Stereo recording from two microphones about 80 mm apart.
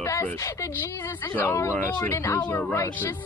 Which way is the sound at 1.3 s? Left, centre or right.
Left.